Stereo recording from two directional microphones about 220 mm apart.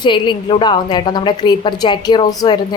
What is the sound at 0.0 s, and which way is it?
A woman's voice, 20° left (ahead or behind).